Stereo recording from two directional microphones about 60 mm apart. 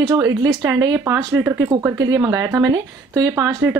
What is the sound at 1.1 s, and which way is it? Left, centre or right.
Speech, right.